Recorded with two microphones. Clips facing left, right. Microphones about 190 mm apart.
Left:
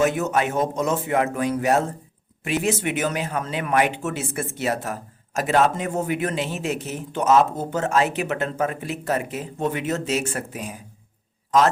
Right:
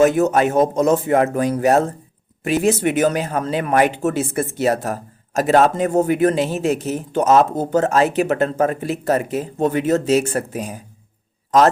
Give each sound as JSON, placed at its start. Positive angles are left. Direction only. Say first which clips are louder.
{"t": 0.0, "sound": "speech", "louder": "right 7 dB", "side_deg": -40}